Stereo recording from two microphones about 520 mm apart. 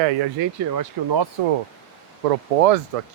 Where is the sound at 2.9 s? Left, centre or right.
Right.